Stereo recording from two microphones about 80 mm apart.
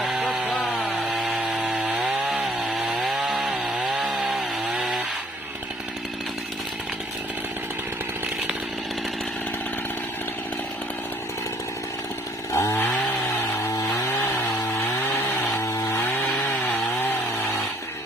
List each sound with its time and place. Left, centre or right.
0.0 s chainsaw: centre
12.5 s chainsaw: left
13.7 s chainsaw: left
15.5 s chainsaw: left